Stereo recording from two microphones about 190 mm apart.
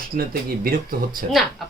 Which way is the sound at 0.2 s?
50° right (ahead or behind).